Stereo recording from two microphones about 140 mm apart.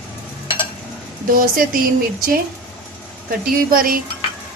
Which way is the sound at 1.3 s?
90° right.